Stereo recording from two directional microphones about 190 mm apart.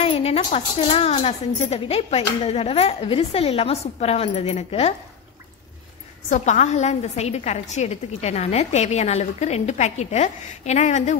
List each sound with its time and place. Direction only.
0.0 s a woman's voice: 30° left (ahead or behind)
6.3 s a woman's voice: 40° left (ahead or behind)